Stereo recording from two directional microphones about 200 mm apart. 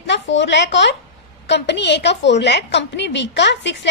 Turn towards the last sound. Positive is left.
turn(degrees=60)  # may be behind; listen again after turning